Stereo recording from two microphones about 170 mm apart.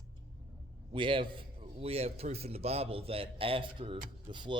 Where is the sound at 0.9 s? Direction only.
30° right (ahead or behind).